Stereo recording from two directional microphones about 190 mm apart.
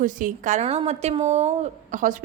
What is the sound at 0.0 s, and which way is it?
A woman's voice, 45° right (ahead or behind).